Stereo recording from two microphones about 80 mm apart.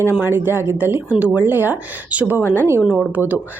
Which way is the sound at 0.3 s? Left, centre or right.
Right.